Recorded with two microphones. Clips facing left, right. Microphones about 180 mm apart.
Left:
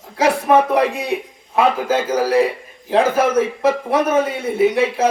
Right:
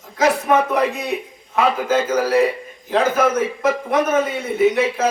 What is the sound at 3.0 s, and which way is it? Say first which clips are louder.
A man's voice: left 2 dB; 30° left (ahead or behind).